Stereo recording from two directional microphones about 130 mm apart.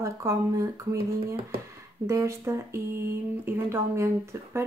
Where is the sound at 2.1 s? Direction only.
20° right (ahead or behind).